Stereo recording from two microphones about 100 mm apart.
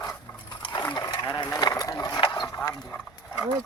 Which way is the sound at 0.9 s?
45° left (ahead or behind).